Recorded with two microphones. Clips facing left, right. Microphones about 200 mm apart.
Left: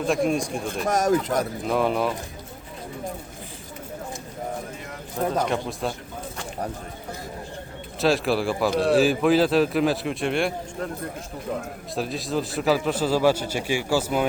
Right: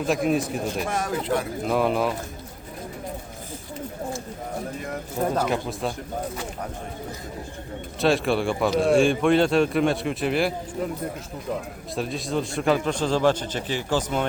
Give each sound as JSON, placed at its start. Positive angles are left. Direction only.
{"t": 0.0, "sound": "a man's voice", "side_deg": 0}
{"t": 0.9, "sound": "speech", "side_deg": 40}
{"t": 1.6, "sound": "a man's voice", "side_deg": 0}
{"t": 5.4, "sound": "a man's voice", "side_deg": 0}
{"t": 8.0, "sound": "a man's voice", "side_deg": 0}
{"t": 11.9, "sound": "a man's voice", "side_deg": 0}